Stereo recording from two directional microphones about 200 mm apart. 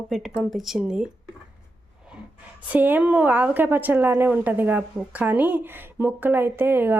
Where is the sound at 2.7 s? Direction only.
10° right (ahead or behind).